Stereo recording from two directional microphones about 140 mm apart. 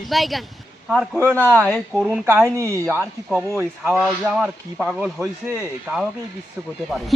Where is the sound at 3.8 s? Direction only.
5° right (ahead or behind).